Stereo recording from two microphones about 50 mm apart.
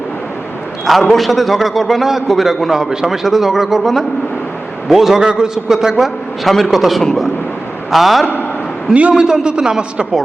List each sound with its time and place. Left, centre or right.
1.0 s a man's voice: centre
8.9 s a man's voice: right
9.1 s a man's voice: centre